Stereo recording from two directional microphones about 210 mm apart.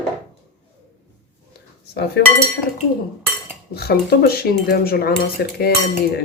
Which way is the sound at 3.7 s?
50° left (ahead or behind).